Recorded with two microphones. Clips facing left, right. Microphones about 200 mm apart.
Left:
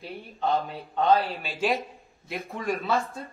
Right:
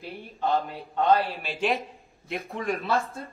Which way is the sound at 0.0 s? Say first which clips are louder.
Even; centre (ahead or behind).